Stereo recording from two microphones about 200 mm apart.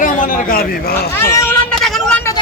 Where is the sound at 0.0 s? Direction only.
40° left (ahead or behind).